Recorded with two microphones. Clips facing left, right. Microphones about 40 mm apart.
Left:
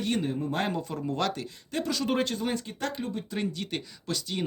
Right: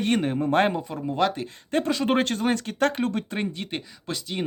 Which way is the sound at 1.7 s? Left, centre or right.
Right.